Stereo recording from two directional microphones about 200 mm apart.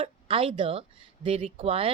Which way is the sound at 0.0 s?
30° right (ahead or behind).